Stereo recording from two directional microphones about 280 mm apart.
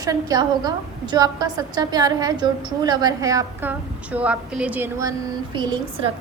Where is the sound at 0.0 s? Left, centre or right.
Centre.